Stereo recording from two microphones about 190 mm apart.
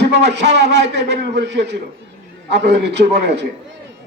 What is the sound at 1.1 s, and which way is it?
Speech, 65° right (ahead or behind).